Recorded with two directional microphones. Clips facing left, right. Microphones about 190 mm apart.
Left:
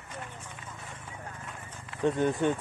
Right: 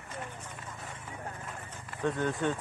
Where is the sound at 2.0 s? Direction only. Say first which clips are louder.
Left 4 dB; 15° left (ahead or behind).